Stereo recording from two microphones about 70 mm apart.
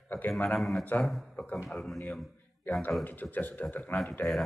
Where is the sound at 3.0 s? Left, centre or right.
Left.